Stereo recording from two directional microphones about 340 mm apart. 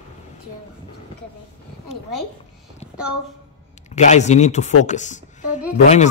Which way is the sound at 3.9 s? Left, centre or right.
Left.